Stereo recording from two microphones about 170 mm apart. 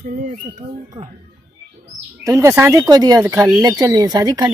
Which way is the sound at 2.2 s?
15° right (ahead or behind).